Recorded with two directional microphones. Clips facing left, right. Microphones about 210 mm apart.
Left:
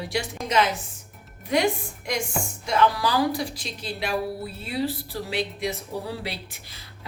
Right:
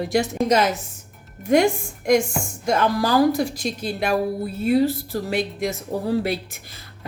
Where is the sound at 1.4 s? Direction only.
50° right (ahead or behind).